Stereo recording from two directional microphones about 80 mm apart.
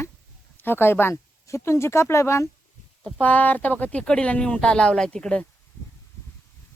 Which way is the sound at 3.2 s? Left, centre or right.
Left.